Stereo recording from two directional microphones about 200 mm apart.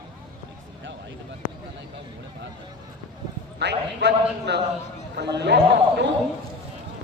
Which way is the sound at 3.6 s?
60° right (ahead or behind).